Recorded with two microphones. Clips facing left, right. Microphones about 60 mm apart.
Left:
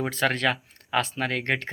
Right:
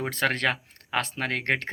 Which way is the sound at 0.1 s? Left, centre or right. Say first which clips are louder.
Right 1 dB; right.